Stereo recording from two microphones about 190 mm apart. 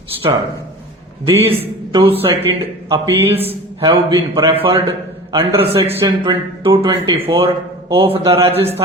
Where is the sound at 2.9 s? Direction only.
20° right (ahead or behind).